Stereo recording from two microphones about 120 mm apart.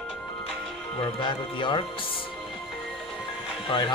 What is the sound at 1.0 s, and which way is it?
Speech, 40° left (ahead or behind).